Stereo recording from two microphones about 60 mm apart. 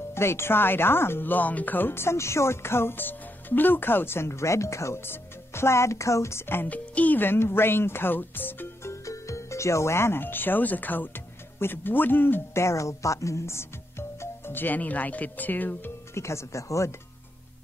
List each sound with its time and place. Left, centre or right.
0.1 s speech: left
5.0 s speech: left
6.7 s speech: left
8.8 s speech: left
12.5 s speech: left
16.2 s speech: left